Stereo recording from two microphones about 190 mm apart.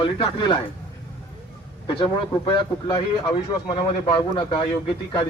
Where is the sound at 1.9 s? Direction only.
25° left (ahead or behind).